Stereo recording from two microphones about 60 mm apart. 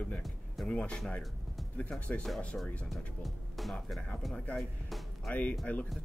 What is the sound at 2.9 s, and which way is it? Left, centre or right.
Speech, centre.